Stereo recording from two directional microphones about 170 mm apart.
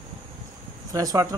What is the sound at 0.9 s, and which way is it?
Speech, 20° right (ahead or behind).